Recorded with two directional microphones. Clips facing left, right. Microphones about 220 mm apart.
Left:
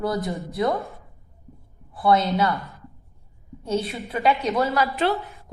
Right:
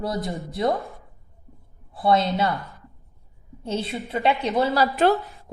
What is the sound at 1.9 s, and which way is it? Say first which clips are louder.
Speech: left 1 dB; 30° right (ahead or behind).